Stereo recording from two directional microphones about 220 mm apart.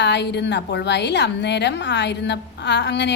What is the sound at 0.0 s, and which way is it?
A woman's voice, 50° left (ahead or behind).